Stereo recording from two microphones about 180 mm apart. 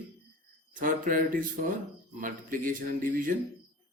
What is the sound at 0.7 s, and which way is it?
Speech, 50° right (ahead or behind).